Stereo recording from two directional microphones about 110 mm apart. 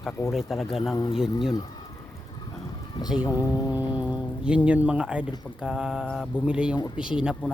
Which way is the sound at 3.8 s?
40° left (ahead or behind).